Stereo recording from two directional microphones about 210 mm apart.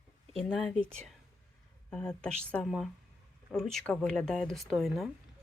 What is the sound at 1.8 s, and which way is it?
Speech, 5° left (ahead or behind).